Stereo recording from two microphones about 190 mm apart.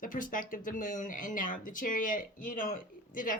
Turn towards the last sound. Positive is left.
turn(degrees=45)  # may be behind; listen again after turning